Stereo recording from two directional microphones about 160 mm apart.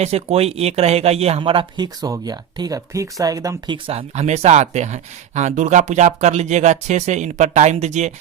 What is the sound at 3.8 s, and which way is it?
Speech, 40° right (ahead or behind).